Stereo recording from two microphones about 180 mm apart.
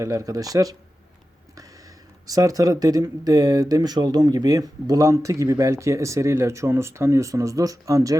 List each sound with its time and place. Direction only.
0.0 s speech: 20° right (ahead or behind)
2.2 s speech: 20° right (ahead or behind)